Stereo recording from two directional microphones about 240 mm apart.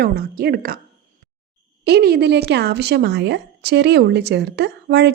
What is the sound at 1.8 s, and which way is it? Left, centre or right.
A woman's voice, right.